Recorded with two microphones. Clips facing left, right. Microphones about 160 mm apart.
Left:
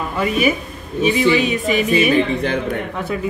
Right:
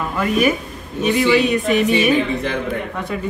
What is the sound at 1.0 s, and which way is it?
Speech, 60° right (ahead or behind).